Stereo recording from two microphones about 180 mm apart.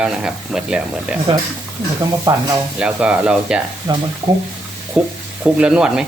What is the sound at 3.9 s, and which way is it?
Speech, 25° right (ahead or behind).